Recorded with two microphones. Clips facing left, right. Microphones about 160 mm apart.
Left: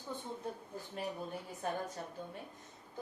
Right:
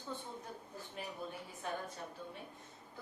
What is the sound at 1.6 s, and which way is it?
Speech, 45° left (ahead or behind).